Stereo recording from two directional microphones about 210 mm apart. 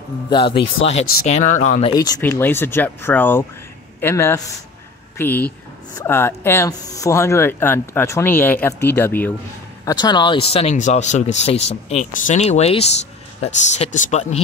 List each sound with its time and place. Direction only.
0.3 s a man's voice: 25° left (ahead or behind)
1.1 s speech: 35° left (ahead or behind)
1.9 s speech: 15° left (ahead or behind)